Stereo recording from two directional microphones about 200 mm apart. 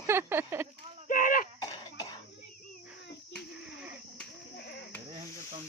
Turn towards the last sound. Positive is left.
turn(degrees=55)  # may be behind; listen again after turning